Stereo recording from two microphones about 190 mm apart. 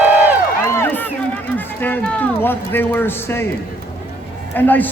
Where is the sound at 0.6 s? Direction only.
10° left (ahead or behind).